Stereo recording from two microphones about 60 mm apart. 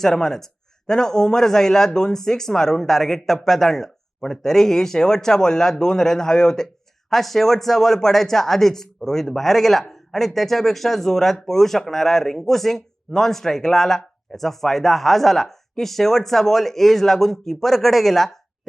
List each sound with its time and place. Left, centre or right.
0.0 s a man's voice: centre